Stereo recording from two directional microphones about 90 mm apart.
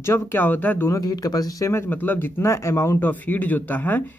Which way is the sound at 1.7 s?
25° left (ahead or behind).